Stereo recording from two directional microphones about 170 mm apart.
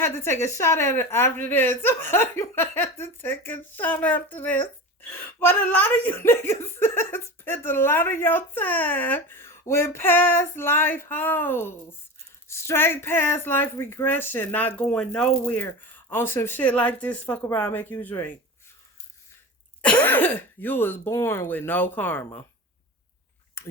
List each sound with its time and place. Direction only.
0.0 s a woman's voice: 15° left (ahead or behind)
19.8 s a woman's voice: 10° left (ahead or behind)
23.6 s a sound: 15° left (ahead or behind)